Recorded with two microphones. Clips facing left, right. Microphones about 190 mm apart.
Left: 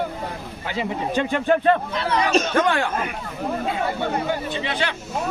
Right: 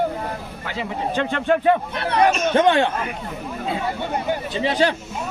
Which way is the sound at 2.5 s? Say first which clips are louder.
Right 4 dB; 25° right (ahead or behind).